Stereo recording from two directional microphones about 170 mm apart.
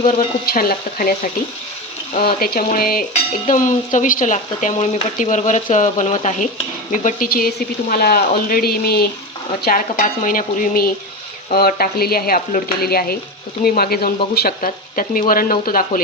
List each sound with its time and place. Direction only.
0.4 s speech: 60° left (ahead or behind)
3.4 s speech: 45° left (ahead or behind)